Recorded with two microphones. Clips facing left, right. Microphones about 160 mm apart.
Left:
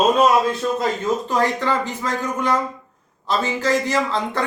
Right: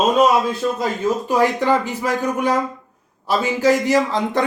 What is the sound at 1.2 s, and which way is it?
A man's voice, 15° right (ahead or behind).